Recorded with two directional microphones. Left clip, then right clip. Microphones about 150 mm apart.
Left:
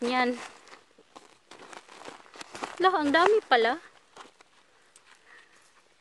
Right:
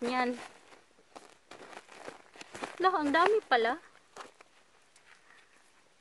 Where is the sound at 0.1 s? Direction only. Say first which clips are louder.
Left 5 dB; 55° left (ahead or behind).